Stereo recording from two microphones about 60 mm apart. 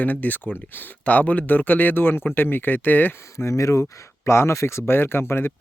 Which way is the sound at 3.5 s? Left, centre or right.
Left.